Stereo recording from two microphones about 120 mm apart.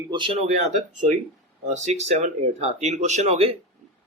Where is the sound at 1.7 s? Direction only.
70° right (ahead or behind).